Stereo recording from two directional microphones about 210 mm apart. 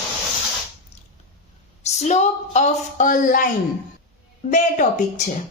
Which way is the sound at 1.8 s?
30° left (ahead or behind).